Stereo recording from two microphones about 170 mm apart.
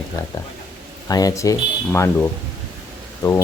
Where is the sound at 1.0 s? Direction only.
20° left (ahead or behind).